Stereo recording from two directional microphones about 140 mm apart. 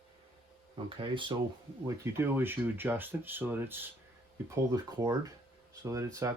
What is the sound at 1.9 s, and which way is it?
Speech, 15° right (ahead or behind).